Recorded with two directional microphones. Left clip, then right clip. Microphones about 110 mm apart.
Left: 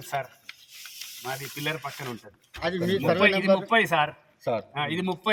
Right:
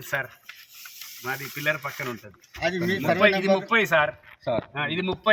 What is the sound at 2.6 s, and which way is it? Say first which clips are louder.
Speech: right 2 dB; 55° left (ahead or behind).